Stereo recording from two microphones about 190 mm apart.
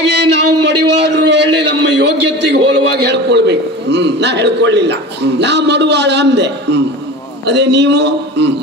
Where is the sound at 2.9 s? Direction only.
60° right (ahead or behind).